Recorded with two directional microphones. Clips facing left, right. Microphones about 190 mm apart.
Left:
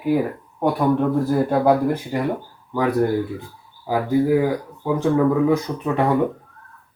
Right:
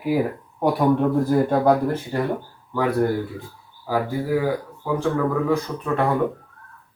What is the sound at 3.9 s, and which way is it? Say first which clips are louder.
Speech: left 5 dB; 20° left (ahead or behind).